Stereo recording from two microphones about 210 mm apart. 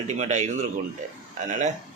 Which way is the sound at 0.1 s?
35° right (ahead or behind).